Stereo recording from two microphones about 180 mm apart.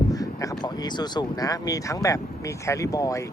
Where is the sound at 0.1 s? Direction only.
20° left (ahead or behind).